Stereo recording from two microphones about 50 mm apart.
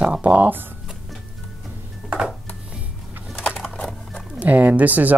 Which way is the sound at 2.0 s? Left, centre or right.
Centre.